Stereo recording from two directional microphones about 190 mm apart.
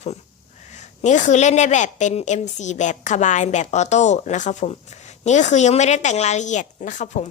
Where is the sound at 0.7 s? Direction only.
40° left (ahead or behind).